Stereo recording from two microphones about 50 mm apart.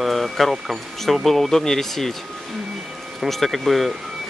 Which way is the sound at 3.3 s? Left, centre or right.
Centre.